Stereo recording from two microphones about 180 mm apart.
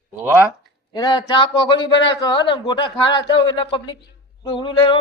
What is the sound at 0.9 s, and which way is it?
A man's voice, 25° left (ahead or behind).